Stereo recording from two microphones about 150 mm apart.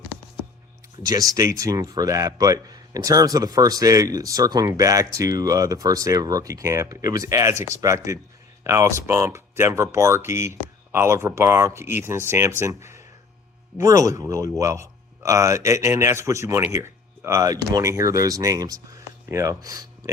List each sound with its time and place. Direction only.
1.0 s a man's voice: 25° right (ahead or behind)